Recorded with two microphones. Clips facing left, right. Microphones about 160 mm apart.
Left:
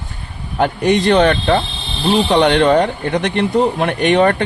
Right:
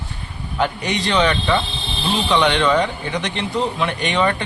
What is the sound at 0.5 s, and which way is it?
Speech, 50° left (ahead or behind).